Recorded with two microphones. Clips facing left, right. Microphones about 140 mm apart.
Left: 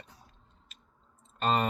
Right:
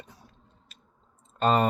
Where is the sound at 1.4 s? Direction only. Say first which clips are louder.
Right 5 dB; 35° right (ahead or behind).